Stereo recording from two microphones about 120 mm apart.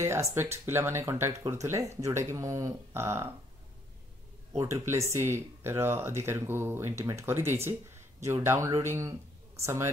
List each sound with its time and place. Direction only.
0.0 s speech: 25° right (ahead or behind)
4.5 s a woman's voice: 25° right (ahead or behind)